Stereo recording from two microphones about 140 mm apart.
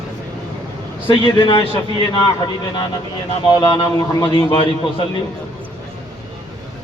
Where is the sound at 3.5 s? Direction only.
35° left (ahead or behind).